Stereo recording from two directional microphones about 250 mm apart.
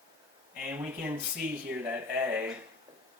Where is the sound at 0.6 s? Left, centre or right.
Centre.